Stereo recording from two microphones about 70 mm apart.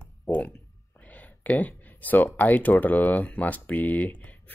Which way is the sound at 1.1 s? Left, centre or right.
Left.